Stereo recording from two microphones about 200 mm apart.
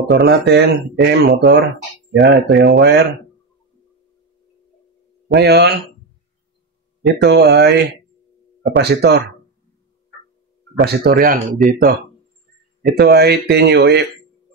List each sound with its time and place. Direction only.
0.0 s speech: 60° right (ahead or behind)
5.3 s speech: 55° right (ahead or behind)
7.0 s speech: 55° right (ahead or behind)
10.8 s speech: 50° right (ahead or behind)
12.9 s speech: 55° right (ahead or behind)